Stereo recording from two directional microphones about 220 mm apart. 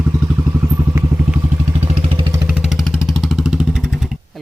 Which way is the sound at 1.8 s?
25° right (ahead or behind).